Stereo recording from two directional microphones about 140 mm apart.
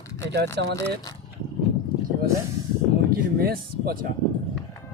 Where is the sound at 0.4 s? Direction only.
15° left (ahead or behind).